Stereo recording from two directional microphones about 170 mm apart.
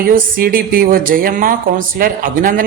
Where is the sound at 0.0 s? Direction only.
55° right (ahead or behind).